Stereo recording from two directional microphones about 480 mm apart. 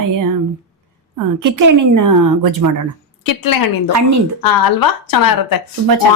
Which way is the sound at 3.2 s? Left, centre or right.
Left.